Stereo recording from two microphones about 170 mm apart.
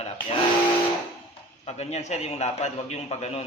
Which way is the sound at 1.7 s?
40° left (ahead or behind).